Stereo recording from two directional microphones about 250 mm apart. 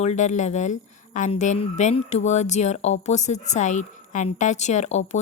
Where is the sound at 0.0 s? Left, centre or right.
Left.